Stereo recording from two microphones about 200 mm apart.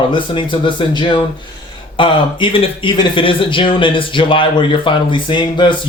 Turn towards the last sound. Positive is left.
turn(degrees=25)  # may be behind; listen again after turning